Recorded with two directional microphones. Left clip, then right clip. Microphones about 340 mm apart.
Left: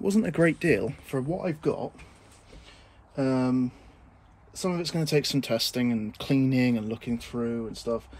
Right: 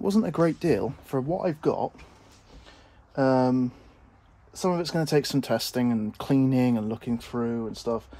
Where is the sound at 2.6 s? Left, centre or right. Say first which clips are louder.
Even; centre.